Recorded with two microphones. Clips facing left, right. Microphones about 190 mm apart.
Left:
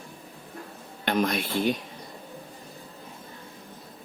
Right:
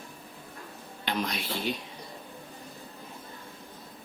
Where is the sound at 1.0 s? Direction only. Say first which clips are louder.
Left 7 dB; 50° left (ahead or behind).